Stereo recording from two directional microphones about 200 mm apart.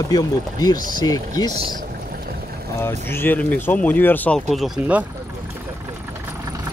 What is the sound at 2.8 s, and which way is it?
Speech, 10° left (ahead or behind).